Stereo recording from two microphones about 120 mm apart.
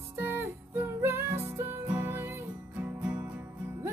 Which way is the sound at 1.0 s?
20° right (ahead or behind).